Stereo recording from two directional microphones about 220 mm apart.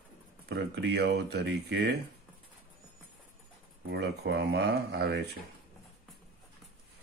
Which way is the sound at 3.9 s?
50° right (ahead or behind).